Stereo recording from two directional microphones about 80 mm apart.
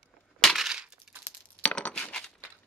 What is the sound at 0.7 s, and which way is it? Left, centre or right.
Crushing, centre.